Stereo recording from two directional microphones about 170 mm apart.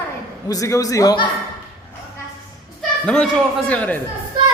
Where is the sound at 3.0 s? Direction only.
5° left (ahead or behind).